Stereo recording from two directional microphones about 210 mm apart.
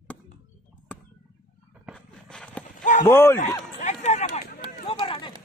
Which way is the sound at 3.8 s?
35° left (ahead or behind).